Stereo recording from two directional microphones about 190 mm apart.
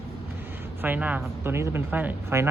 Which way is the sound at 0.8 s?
10° right (ahead or behind).